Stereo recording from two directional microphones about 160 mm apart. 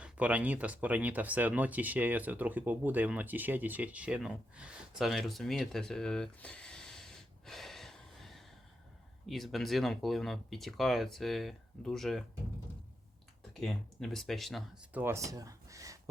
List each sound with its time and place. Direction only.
0.0 s speech: 10° right (ahead or behind)
13.5 s speech: centre (ahead or behind)
14.9 s speech: 15° right (ahead or behind)